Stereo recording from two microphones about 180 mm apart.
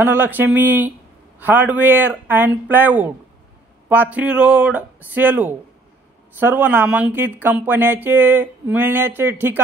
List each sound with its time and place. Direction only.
0.0 s speech: 10° right (ahead or behind)